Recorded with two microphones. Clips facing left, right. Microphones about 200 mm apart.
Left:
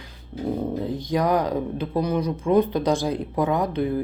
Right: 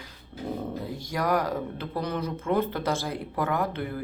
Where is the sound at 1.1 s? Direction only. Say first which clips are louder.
Left 4 dB; 20° left (ahead or behind).